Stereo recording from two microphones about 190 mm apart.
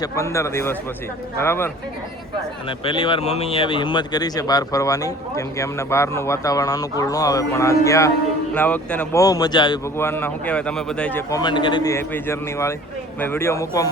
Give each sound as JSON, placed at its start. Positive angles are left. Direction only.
{"t": 0.0, "sound": "speech", "side_deg": 15}
{"t": 2.6, "sound": "speech", "side_deg": 25}
{"t": 9.2, "sound": "speech", "side_deg": 20}
{"t": 10.0, "sound": "speech", "side_deg": 10}
{"t": 11.3, "sound": "speech", "side_deg": 20}